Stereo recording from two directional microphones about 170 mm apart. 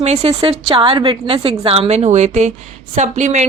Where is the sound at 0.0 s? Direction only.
35° right (ahead or behind).